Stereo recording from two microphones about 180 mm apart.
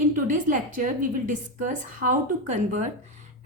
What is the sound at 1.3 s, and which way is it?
A woman's voice, 45° right (ahead or behind).